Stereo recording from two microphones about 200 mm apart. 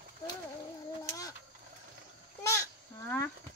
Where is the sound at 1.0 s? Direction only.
15° left (ahead or behind).